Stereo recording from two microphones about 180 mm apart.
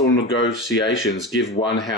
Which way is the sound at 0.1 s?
90° left.